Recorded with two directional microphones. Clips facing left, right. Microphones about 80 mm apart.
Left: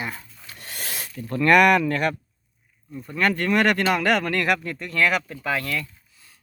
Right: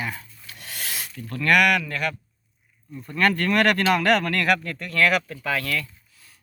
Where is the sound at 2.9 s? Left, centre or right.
Centre.